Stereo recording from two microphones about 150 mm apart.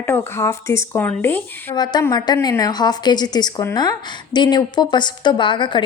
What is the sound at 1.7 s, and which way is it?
Speech, 30° left (ahead or behind).